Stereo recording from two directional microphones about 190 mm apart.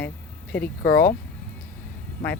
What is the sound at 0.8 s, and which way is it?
Speech, 55° left (ahead or behind).